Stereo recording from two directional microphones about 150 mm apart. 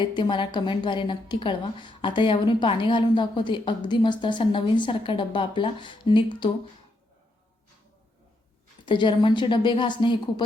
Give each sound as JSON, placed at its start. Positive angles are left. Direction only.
{"t": 0.0, "sound": "a woman's voice", "side_deg": 30}
{"t": 8.9, "sound": "a woman's voice", "side_deg": 30}